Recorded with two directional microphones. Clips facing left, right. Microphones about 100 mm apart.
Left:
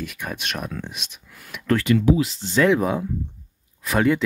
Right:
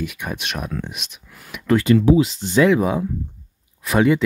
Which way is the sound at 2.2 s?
15° right (ahead or behind).